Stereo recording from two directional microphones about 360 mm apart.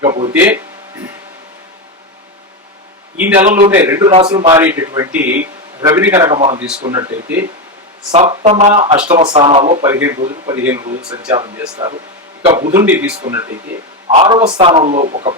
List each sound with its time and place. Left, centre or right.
0.0 s speech: centre
3.2 s a man's voice: centre